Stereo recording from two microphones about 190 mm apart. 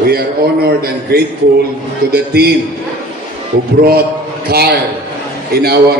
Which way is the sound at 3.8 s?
55° right (ahead or behind).